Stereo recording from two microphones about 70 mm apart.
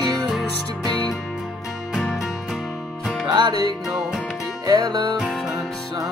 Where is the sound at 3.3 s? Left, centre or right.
Right.